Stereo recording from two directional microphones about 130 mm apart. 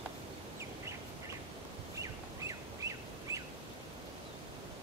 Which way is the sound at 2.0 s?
25° right (ahead or behind).